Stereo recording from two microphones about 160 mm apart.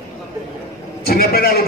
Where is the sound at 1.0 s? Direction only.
70° left (ahead or behind).